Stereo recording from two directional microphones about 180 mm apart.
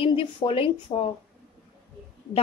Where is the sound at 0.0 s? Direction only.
30° left (ahead or behind).